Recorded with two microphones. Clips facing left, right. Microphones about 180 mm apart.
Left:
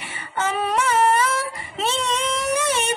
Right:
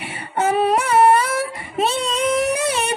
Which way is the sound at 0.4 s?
65° right (ahead or behind).